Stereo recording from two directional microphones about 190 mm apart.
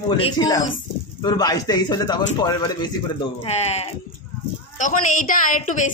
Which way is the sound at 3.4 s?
35° left (ahead or behind).